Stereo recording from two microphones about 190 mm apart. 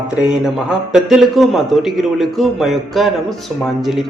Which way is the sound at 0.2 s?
5° right (ahead or behind).